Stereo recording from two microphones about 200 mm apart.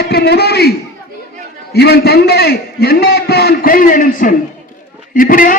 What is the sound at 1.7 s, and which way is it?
A man's voice, 55° left (ahead or behind).